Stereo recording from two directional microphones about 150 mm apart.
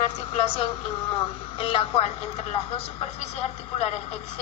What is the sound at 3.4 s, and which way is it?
Speech, 45° left (ahead or behind).